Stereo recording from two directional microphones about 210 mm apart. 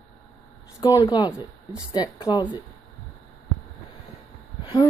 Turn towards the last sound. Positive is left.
turn(degrees=15)  # may be behind; listen again after turning